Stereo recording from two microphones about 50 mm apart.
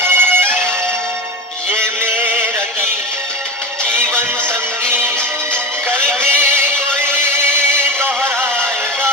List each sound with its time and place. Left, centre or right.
0.0 s music: right
1.7 s music: right
3.9 s music: right
6.0 s music: centre
6.2 s music: right